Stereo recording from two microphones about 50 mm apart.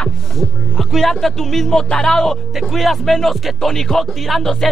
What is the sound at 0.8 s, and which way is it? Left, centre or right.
Speech, centre.